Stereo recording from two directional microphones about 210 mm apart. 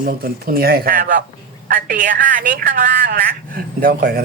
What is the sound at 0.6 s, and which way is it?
Speech, 45° right (ahead or behind).